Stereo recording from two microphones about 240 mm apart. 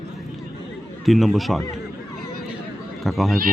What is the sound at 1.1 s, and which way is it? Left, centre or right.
Speech, centre.